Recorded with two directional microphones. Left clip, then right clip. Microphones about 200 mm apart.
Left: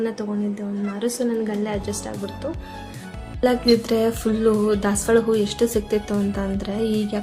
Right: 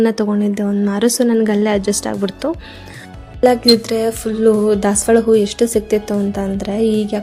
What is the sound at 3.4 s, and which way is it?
Speech, 30° right (ahead or behind).